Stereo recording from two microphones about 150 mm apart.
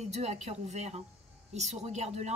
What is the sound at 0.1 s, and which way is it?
A woman's voice, 45° right (ahead or behind).